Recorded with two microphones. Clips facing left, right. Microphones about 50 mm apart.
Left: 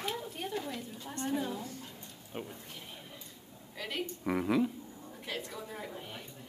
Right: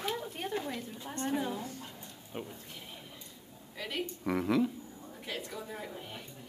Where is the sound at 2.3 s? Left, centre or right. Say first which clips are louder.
Even; centre.